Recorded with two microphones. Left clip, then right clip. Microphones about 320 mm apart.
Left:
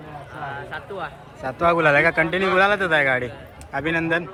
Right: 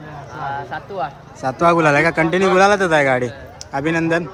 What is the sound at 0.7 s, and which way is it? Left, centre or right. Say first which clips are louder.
Speech: right 6 dB; right.